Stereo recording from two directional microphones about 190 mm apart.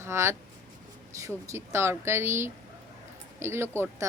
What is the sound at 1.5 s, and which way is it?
Speech, 15° right (ahead or behind).